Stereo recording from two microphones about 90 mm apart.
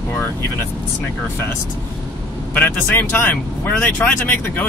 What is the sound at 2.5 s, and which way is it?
Speech, 20° left (ahead or behind).